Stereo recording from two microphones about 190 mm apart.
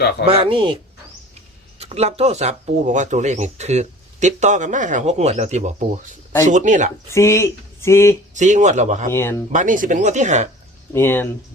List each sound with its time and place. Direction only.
0.3 s speech: 30° right (ahead or behind)
1.8 s speech: 35° right (ahead or behind)
7.1 s speech: 15° left (ahead or behind)
8.3 s speech: 40° right (ahead or behind)
10.9 s speech: 10° left (ahead or behind)